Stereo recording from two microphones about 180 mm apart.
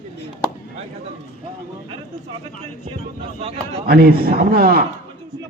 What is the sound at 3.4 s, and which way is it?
Speech, 35° right (ahead or behind).